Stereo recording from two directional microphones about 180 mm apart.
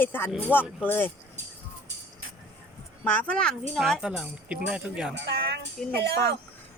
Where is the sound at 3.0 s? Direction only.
10° left (ahead or behind).